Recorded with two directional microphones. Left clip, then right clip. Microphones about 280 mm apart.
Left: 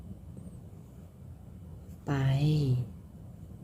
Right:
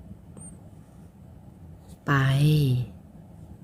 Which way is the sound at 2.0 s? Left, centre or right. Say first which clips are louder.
Right 8 dB; right.